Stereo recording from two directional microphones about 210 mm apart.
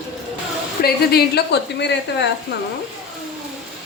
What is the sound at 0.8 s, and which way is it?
Speech, 50° left (ahead or behind).